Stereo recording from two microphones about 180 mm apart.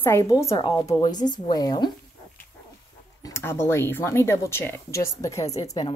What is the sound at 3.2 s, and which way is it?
A woman's voice, 15° left (ahead or behind).